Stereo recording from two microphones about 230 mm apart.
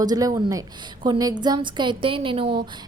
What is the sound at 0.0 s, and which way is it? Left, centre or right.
A woman's voice, centre.